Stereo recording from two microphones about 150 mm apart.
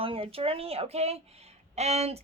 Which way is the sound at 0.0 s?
40° right (ahead or behind).